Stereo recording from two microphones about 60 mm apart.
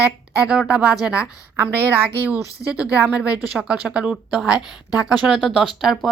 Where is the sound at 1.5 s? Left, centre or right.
Right.